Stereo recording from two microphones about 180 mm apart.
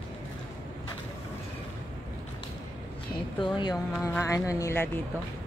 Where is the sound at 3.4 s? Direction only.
25° left (ahead or behind).